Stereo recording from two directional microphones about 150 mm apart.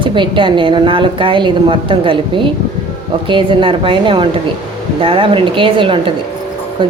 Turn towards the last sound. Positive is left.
turn(degrees=-35)  # may be behind; listen again after turning